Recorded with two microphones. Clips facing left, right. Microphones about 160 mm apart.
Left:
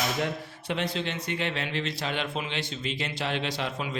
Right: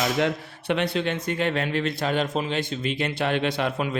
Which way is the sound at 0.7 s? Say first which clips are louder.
Right 6 dB; 60° right (ahead or behind).